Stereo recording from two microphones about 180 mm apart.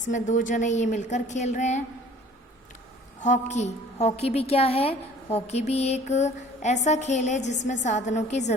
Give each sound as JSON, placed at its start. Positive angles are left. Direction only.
{"t": 0.0, "sound": "a woman's voice", "side_deg": 45}
{"t": 3.2, "sound": "a woman's voice", "side_deg": 40}